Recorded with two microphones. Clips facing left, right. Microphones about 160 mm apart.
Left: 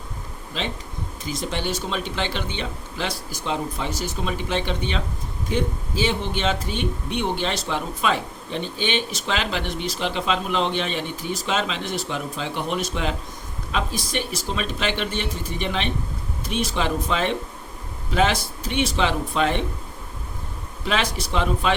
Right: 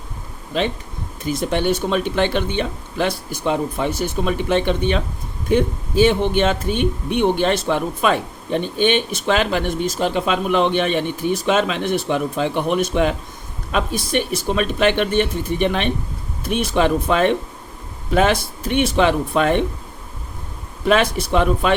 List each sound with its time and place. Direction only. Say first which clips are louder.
0.5 s speech: right 8 dB; 55° right (ahead or behind)
20.8 s speech: right 8 dB; 55° right (ahead or behind)